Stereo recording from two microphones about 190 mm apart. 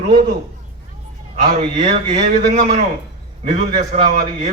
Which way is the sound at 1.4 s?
40° right (ahead or behind).